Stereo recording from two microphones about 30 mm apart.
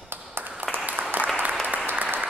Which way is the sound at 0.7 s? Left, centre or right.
Right.